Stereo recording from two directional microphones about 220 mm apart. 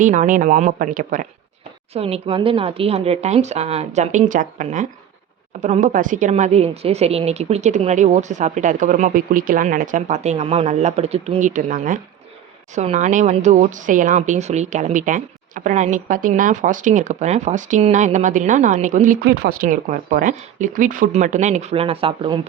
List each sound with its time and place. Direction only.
0.0 s speech: 35° right (ahead or behind)